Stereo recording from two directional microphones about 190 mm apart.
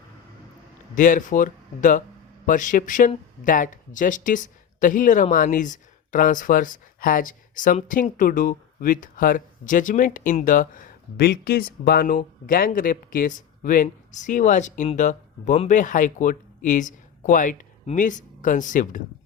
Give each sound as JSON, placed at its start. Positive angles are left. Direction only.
{"t": 0.9, "sound": "speech", "side_deg": 45}